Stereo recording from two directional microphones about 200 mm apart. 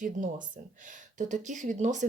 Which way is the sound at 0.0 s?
40° right (ahead or behind).